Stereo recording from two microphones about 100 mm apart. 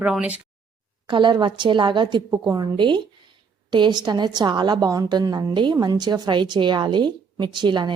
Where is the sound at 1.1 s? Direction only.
50° right (ahead or behind).